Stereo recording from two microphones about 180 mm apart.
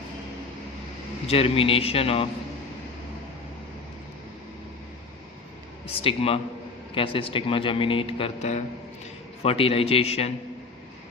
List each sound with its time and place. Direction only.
1.3 s a man's voice: 30° left (ahead or behind)
5.9 s a man's voice: 30° left (ahead or behind)